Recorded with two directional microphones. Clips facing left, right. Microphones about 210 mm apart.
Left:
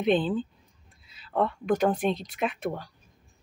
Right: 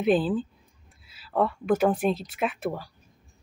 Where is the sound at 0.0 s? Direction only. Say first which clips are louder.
Right 1 dB; 5° right (ahead or behind).